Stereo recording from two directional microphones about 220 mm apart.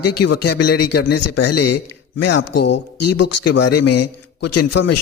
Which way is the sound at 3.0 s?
90° left.